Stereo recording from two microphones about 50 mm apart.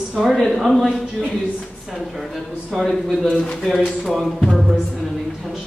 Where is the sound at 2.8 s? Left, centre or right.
Centre.